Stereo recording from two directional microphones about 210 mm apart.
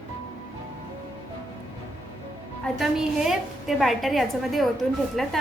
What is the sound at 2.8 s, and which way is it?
A woman's voice, centre (ahead or behind).